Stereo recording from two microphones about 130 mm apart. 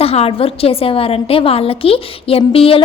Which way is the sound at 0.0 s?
50° left (ahead or behind).